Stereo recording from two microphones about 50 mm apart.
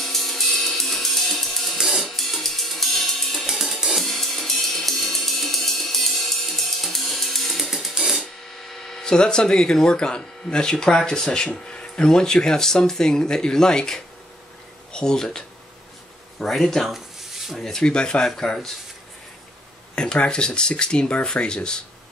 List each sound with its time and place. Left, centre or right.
0.0 s music: centre
8.2 s speech: centre
16.3 s a sound: centre
17.6 s speech: centre
17.8 s speech: centre
20.0 s speech: centre